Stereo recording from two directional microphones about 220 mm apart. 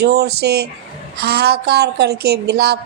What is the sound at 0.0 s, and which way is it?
Speech, 50° right (ahead or behind).